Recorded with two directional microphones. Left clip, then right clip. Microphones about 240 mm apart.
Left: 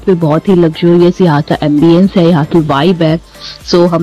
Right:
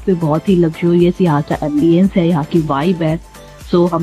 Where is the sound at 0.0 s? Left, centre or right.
Left.